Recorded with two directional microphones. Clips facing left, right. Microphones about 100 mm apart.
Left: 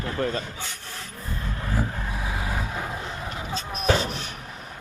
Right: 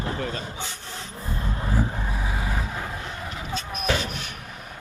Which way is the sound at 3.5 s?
35° left (ahead or behind).